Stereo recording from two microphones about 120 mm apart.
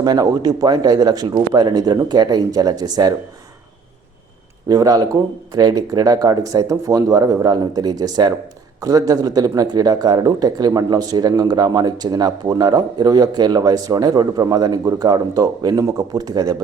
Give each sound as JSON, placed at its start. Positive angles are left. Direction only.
{"t": 0.0, "sound": "speech", "side_deg": -35}
{"t": 4.7, "sound": "speech", "side_deg": -30}